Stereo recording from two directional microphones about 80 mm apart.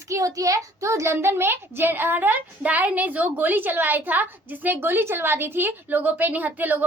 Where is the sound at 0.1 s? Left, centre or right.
Right.